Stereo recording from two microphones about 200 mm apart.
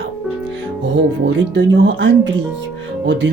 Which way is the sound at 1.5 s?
65° right (ahead or behind).